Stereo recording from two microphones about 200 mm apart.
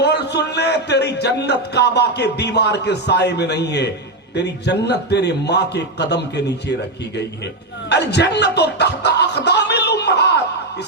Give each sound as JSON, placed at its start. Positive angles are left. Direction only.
{"t": 0.0, "sound": "a man's voice", "side_deg": 60}